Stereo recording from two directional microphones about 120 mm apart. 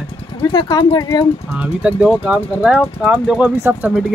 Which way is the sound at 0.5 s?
35° left (ahead or behind).